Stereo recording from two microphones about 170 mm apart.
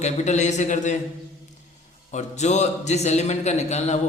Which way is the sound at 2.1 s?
45° left (ahead or behind).